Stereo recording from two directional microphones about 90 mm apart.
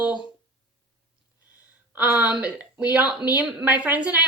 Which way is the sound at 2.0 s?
15° right (ahead or behind).